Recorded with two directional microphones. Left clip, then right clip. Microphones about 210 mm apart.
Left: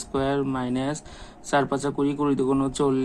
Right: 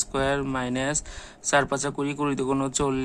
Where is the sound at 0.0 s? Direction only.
20° right (ahead or behind).